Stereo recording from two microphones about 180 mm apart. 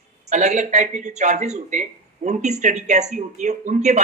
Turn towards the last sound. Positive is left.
turn(degrees=-40)  # may be behind; listen again after turning